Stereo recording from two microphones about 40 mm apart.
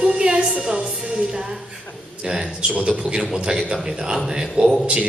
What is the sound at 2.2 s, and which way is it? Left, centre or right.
A man's voice, right.